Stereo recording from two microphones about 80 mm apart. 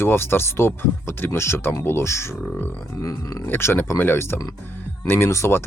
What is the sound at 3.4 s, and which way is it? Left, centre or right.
Speech, left.